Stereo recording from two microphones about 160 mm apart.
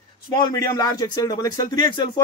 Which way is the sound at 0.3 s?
25° left (ahead or behind).